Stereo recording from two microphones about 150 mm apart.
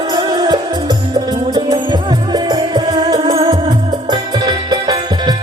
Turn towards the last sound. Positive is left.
turn(degrees=-35)  # may be behind; listen again after turning